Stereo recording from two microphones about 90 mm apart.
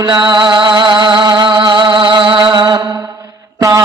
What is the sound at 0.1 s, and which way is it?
Music, 55° right (ahead or behind).